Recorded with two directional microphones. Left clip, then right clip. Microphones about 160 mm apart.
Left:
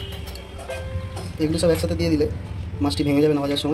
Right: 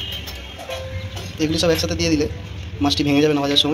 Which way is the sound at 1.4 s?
5° left (ahead or behind).